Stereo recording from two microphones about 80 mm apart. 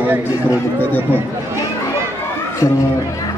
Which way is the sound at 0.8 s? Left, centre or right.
Left.